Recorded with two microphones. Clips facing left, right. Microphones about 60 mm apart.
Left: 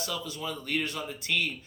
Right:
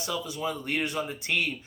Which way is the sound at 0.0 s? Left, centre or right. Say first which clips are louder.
Right 3 dB; centre.